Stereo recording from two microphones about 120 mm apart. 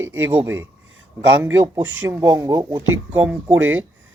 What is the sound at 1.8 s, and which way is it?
Speech, 15° right (ahead or behind).